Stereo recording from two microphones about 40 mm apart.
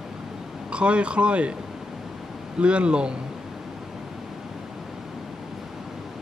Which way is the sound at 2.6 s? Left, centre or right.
Right.